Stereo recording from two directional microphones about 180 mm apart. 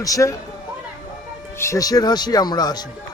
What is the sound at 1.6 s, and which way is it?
A man's voice, 20° left (ahead or behind).